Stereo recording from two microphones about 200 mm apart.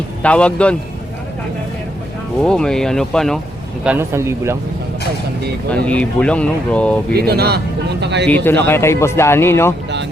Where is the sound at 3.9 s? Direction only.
10° right (ahead or behind).